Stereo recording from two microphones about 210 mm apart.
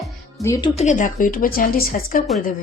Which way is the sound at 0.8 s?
35° left (ahead or behind).